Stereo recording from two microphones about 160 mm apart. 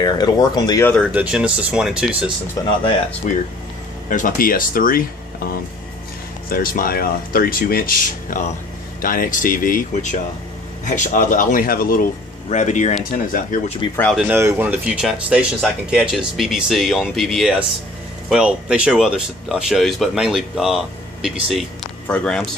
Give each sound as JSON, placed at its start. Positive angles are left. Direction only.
{"t": 0.0, "sound": "speech", "side_deg": 25}
{"t": 1.0, "sound": "speech", "side_deg": -10}
{"t": 2.6, "sound": "speech", "side_deg": 20}
{"t": 3.3, "sound": "speech", "side_deg": 50}
{"t": 4.1, "sound": "speech", "side_deg": 60}
{"t": 6.5, "sound": "speech", "side_deg": 65}
{"t": 12.5, "sound": "speech", "side_deg": 50}
{"t": 14.1, "sound": "speech", "side_deg": -5}
{"t": 22.0, "sound": "speech", "side_deg": 10}